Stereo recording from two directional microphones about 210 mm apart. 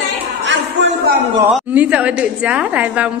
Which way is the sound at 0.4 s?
60° right (ahead or behind).